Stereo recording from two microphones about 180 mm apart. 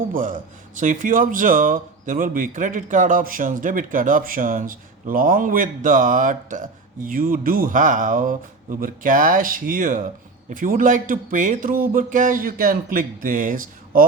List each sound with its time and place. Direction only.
0.1 s speech: 50° right (ahead or behind)